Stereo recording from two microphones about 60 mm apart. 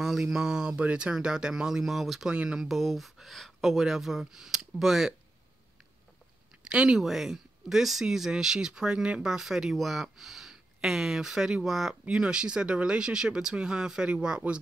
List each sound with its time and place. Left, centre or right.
0.0 s speech: centre
2.3 s speech: centre
2.6 s speech: centre
6.6 s speech: centre